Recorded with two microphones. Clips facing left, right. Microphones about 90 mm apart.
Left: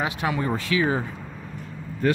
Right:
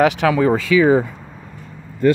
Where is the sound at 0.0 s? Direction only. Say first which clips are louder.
Right 11 dB; 80° right.